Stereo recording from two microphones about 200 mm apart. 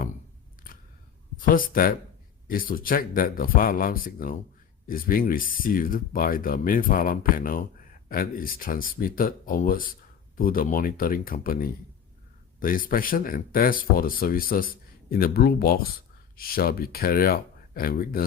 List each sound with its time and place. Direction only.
1.4 s speech: 45° left (ahead or behind)